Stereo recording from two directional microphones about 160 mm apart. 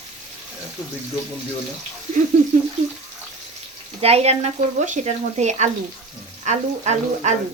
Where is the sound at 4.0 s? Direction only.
40° right (ahead or behind).